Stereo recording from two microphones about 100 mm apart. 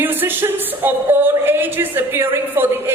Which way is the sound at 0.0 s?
20° right (ahead or behind).